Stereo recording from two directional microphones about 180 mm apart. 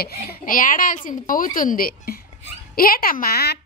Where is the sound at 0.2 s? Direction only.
50° left (ahead or behind).